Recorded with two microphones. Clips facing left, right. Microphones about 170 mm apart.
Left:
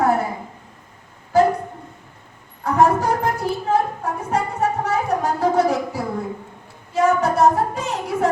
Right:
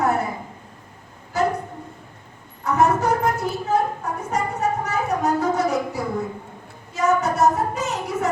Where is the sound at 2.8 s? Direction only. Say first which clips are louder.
Left 2 dB; 30° left (ahead or behind).